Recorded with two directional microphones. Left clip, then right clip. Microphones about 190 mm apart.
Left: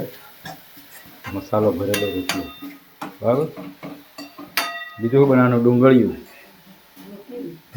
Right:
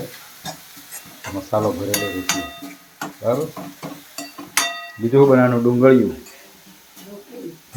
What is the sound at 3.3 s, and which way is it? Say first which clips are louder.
Speech: left 1 dB; 15° left (ahead or behind).